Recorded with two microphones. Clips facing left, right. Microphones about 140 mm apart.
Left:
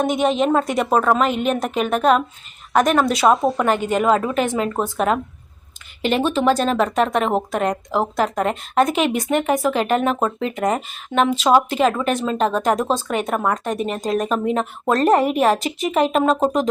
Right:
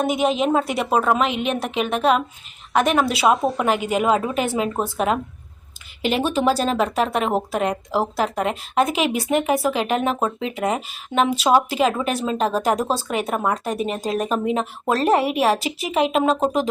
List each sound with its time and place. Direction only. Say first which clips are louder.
0.0 s speech: left 2 dB; 5° right (ahead or behind)
1.3 s a woman's voice: left 3 dB; 40° left (ahead or behind)
1.8 s a woman's voice: left 2 dB; centre (ahead or behind)